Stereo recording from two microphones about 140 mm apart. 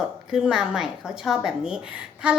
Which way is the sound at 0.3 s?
5° right (ahead or behind).